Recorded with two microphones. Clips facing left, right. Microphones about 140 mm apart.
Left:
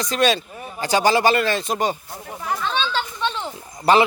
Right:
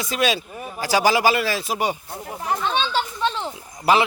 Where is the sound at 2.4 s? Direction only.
20° right (ahead or behind).